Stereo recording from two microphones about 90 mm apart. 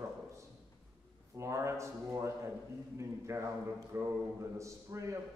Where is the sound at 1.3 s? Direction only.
35° right (ahead or behind).